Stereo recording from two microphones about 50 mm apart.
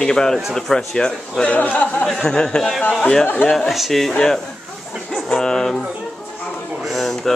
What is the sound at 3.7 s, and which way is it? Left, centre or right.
Speech, centre.